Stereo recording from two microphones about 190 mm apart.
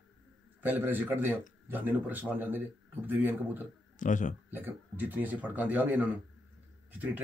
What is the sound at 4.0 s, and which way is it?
Speech, 40° left (ahead or behind).